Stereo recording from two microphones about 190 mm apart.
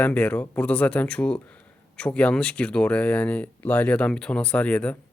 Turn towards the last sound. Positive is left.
turn(degrees=5)  # may be behind; listen again after turning